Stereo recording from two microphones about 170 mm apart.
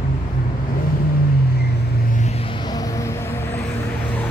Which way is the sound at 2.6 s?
20° left (ahead or behind).